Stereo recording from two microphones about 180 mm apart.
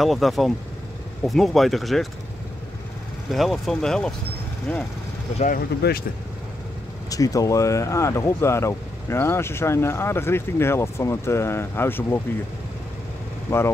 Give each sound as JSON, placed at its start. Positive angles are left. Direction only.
{"t": 0.0, "sound": "speech", "side_deg": 0}
{"t": 3.3, "sound": "speech", "side_deg": 0}
{"t": 5.8, "sound": "speech", "side_deg": 60}
{"t": 7.1, "sound": "speech", "side_deg": 20}
{"t": 13.5, "sound": "speech", "side_deg": 15}